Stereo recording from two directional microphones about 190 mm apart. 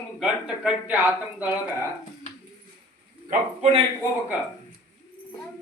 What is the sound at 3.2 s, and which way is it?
Speech, 30° right (ahead or behind).